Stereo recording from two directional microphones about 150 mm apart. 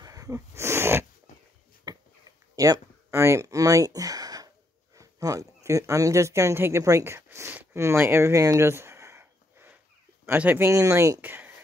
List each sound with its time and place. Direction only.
0.0 s wheeze: 25° right (ahead or behind)
1.9 s a sound: 25° right (ahead or behind)
2.5 s speech: 25° right (ahead or behind)